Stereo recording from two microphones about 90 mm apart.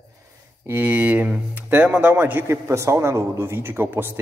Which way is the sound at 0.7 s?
20° right (ahead or behind).